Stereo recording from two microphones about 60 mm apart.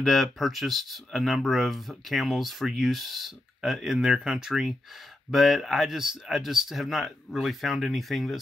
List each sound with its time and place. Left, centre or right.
0.0 s speech: centre